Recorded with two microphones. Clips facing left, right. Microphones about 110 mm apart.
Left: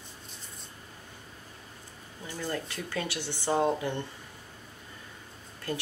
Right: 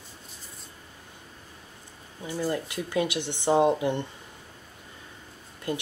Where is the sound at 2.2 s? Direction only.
15° right (ahead or behind).